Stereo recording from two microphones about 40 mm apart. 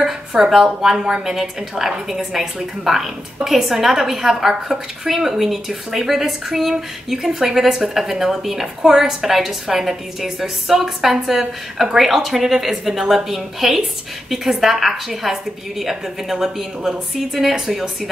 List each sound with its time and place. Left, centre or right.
0.4 s a woman's voice: centre
0.9 s a woman's voice: right
1.2 s a woman's voice: centre